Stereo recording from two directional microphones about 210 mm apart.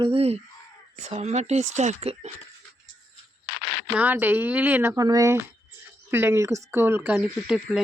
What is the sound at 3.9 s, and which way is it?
Speech, 10° right (ahead or behind).